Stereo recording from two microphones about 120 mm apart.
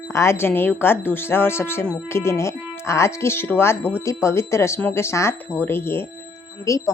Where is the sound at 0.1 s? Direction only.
20° left (ahead or behind).